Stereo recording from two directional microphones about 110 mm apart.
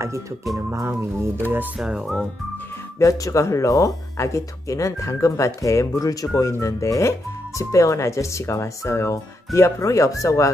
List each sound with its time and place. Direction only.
0.6 s music: 25° right (ahead or behind)
1.8 s speech: 5° right (ahead or behind)
3.0 s speech: 30° left (ahead or behind)